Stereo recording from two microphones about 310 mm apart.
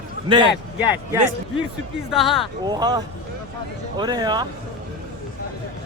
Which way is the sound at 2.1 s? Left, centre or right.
Centre.